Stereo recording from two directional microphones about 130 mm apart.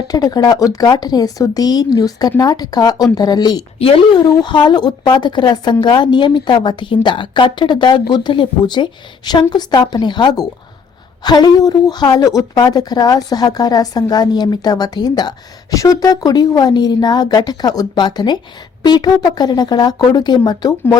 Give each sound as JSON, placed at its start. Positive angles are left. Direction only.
{"t": 0.1, "sound": "a woman's voice", "side_deg": 30}